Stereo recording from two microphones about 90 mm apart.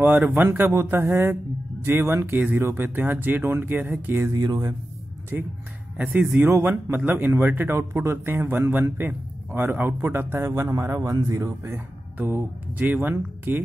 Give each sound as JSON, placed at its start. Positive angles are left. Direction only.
{"t": 0.0, "sound": "a man's voice", "side_deg": -25}
{"t": 4.3, "sound": "speech", "side_deg": -45}
{"t": 5.3, "sound": "a man's voice", "side_deg": -25}
{"t": 12.7, "sound": "a man's voice", "side_deg": -20}